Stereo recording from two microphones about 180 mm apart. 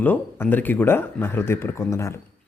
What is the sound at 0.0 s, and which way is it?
A man's voice, 10° left (ahead or behind).